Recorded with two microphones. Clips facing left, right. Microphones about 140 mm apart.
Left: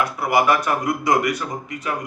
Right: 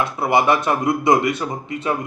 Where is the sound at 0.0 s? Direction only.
25° right (ahead or behind).